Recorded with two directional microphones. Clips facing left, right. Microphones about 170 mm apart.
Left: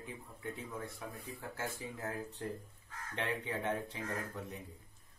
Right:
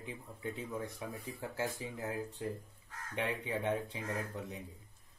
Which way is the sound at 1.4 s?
15° right (ahead or behind).